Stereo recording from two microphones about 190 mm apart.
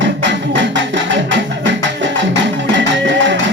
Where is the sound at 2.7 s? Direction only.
70° right (ahead or behind).